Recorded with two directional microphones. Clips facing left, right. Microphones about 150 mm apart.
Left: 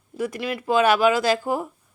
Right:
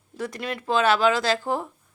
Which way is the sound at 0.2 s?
10° left (ahead or behind).